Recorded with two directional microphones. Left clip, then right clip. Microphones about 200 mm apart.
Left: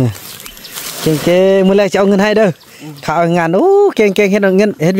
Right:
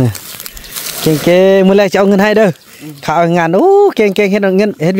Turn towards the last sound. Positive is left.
turn(degrees=0)  # may be behind; listen again after turning